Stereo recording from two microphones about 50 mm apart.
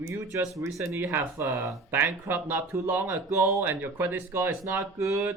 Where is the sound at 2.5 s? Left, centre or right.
Right.